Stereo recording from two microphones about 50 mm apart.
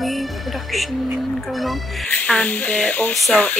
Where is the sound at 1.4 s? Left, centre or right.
Centre.